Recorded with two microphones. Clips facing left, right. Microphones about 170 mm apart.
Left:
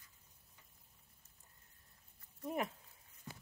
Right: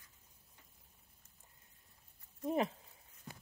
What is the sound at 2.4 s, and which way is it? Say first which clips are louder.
Speech: right 5 dB; 25° right (ahead or behind).